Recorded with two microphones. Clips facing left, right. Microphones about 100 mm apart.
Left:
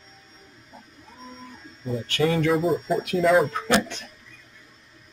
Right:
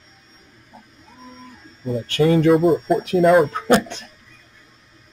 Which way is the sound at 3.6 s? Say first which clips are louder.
Right 6 dB; 35° right (ahead or behind).